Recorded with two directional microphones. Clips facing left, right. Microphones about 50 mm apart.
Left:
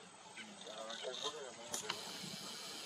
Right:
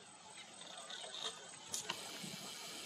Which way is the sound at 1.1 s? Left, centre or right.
Centre.